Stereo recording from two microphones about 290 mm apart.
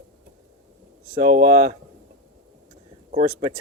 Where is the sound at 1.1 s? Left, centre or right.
Right.